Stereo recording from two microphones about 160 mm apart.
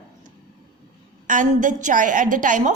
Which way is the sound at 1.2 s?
55° right (ahead or behind).